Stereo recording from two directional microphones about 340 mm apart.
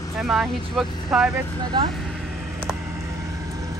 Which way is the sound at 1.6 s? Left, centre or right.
Centre.